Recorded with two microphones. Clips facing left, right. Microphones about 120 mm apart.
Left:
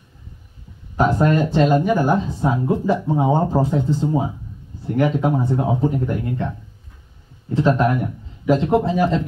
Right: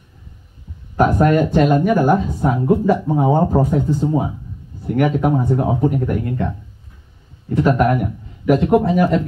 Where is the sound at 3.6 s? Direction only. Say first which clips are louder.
Right 2 dB; 25° left (ahead or behind).